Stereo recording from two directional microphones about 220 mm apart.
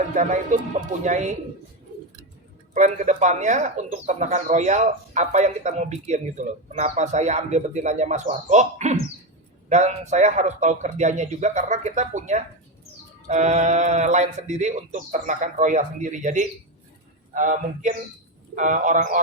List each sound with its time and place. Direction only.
0.1 s speech: 35° right (ahead or behind)
2.7 s speech: 35° right (ahead or behind)